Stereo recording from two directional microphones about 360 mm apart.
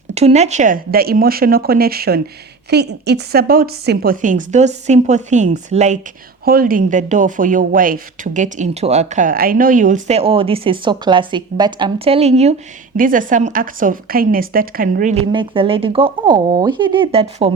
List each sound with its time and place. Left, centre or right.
0.1 s a woman's voice: centre